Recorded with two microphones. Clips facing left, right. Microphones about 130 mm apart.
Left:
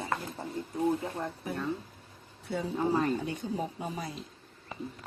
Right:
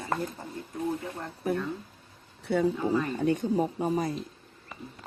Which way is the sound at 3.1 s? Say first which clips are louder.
Right 6 dB; 50° right (ahead or behind).